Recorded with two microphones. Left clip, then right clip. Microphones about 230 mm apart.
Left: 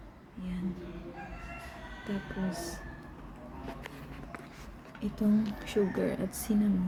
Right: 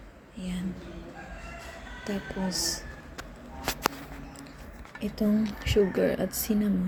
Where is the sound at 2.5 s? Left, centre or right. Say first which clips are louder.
Right 8 dB; centre.